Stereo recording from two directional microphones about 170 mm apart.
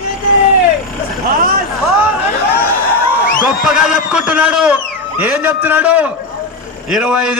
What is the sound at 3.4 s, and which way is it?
A man's voice, 5° right (ahead or behind).